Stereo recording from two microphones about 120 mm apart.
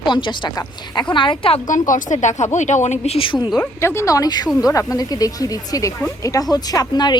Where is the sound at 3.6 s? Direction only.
20° left (ahead or behind).